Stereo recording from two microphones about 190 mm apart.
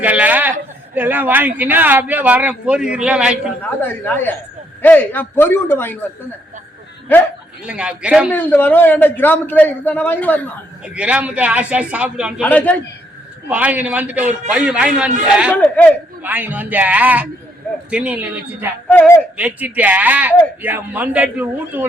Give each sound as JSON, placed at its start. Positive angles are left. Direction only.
{"t": 0.0, "sound": "a sound", "side_deg": -10}
{"t": 0.9, "sound": "a man's voice", "side_deg": -10}
{"t": 3.8, "sound": "a man's voice", "side_deg": 10}
{"t": 7.6, "sound": "a man's voice", "side_deg": -5}
{"t": 8.3, "sound": "a man's voice", "side_deg": 10}
{"t": 10.8, "sound": "a man's voice", "side_deg": -5}
{"t": 12.4, "sound": "a man's voice", "side_deg": 10}
{"t": 13.5, "sound": "a man's voice", "side_deg": -10}
{"t": 15.5, "sound": "a man's voice", "side_deg": 10}
{"t": 16.2, "sound": "a man's voice", "side_deg": -10}
{"t": 18.9, "sound": "a man's voice", "side_deg": 10}
{"t": 19.4, "sound": "a man's voice", "side_deg": -10}